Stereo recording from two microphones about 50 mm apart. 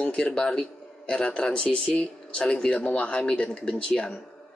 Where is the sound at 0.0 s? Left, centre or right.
Left.